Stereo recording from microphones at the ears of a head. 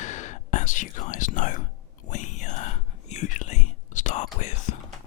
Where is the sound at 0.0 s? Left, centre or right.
Left.